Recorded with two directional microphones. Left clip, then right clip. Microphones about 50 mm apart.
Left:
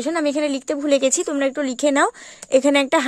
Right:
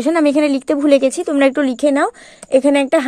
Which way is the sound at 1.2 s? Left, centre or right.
Left.